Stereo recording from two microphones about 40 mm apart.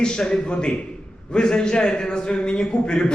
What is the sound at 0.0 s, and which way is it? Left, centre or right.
A man's voice, left.